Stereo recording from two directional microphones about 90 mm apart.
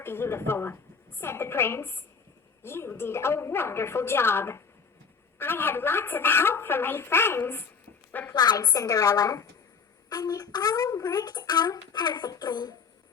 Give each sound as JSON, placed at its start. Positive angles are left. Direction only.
{"t": 0.0, "sound": "a woman's voice", "side_deg": 25}
{"t": 8.3, "sound": "speech", "side_deg": 50}